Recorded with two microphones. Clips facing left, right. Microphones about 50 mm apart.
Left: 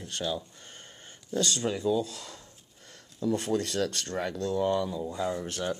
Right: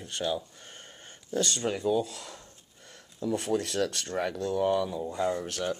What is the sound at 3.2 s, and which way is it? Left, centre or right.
Speech, centre.